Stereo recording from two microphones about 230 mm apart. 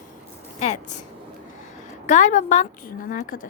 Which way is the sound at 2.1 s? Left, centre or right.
Left.